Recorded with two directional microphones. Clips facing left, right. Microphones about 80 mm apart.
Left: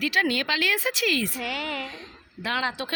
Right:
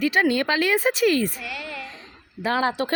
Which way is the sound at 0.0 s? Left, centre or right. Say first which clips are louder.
Right 4 dB; right.